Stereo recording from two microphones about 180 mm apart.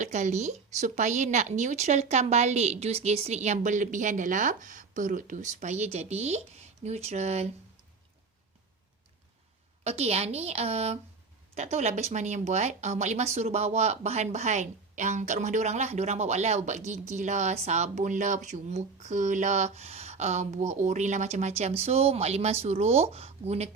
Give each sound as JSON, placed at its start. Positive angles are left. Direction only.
{"t": 0.0, "sound": "speech", "side_deg": -40}
{"t": 9.8, "sound": "speech", "side_deg": -35}